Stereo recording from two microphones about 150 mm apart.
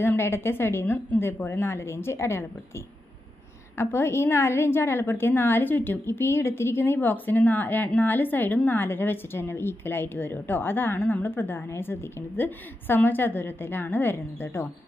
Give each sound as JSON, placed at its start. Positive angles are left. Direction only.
{"t": 0.0, "sound": "a woman's voice", "side_deg": 15}
{"t": 3.7, "sound": "a woman's voice", "side_deg": 15}